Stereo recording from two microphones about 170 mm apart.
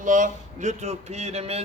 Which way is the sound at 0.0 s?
50° right (ahead or behind).